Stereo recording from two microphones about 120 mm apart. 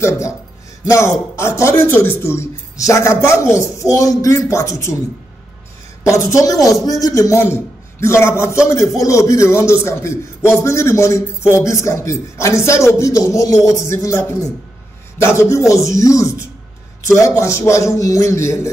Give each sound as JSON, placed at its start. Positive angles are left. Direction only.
{"t": 0.8, "sound": "a man's voice", "side_deg": 25}
{"t": 6.0, "sound": "a man's voice", "side_deg": 25}